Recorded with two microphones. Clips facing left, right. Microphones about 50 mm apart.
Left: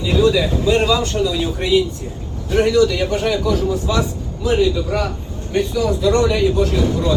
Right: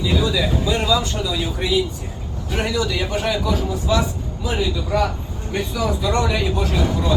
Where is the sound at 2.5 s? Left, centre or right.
Right.